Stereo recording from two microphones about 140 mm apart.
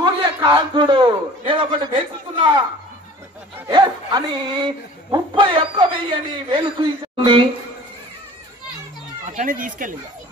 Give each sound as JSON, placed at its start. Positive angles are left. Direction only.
{"t": 0.0, "sound": "a man's voice", "side_deg": -30}
{"t": 3.6, "sound": "speech", "side_deg": -30}
{"t": 9.2, "sound": "speech", "side_deg": -65}